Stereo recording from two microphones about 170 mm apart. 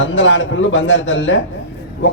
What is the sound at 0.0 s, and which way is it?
A man's voice, 90° left.